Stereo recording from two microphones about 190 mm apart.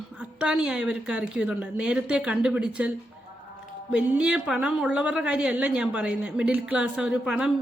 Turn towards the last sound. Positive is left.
turn(degrees=-5)  # may be behind; listen again after turning